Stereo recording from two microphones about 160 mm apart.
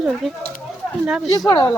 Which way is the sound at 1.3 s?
25° left (ahead or behind).